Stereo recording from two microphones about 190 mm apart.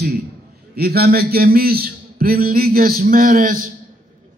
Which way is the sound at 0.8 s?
55° right (ahead or behind).